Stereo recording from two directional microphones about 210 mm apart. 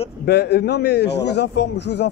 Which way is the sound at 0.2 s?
50° left (ahead or behind).